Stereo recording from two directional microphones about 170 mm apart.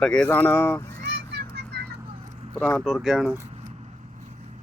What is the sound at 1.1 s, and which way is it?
Children playing, 75° right (ahead or behind).